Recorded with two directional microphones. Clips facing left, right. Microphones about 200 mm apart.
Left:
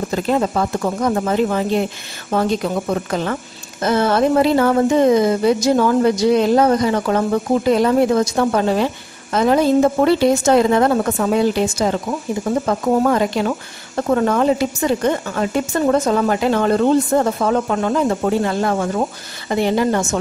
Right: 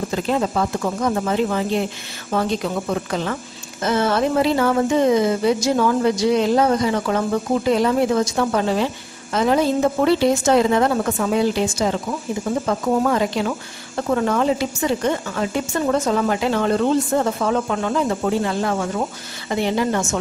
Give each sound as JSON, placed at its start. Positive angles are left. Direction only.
{"t": 0.1, "sound": "speech", "side_deg": 45}